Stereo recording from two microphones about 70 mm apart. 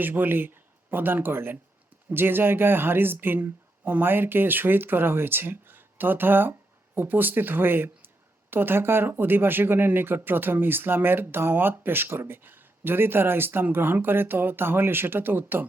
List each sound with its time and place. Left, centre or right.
0.0 s speech: right